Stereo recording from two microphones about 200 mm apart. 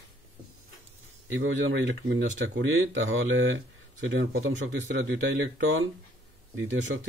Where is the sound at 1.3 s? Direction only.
65° right (ahead or behind).